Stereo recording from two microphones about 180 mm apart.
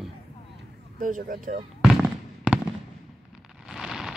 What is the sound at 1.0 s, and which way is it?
Speech, 50° right (ahead or behind).